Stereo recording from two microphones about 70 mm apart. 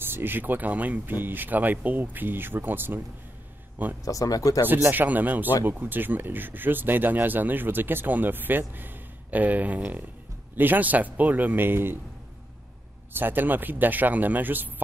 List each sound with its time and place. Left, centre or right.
0.0 s speech: right
4.0 s speech: left
4.8 s speech: right
13.1 s speech: right